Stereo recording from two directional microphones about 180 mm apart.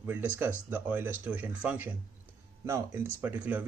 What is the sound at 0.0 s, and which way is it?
Speech, 10° right (ahead or behind).